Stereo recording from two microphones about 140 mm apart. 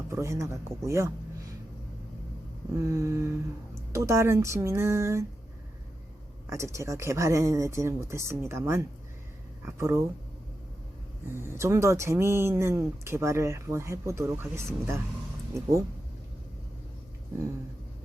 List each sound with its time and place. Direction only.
0.1 s speech: 20° right (ahead or behind)
2.7 s speech: 20° right (ahead or behind)
6.5 s speech: 20° right (ahead or behind)
11.4 s speech: 20° right (ahead or behind)